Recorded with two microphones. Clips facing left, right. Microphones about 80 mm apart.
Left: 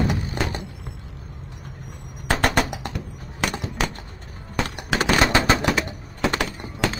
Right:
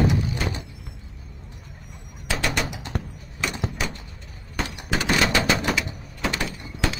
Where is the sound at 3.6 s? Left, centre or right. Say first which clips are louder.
Left 3 dB; left.